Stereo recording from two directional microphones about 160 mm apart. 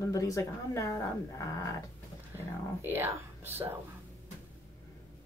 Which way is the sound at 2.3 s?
15° right (ahead or behind).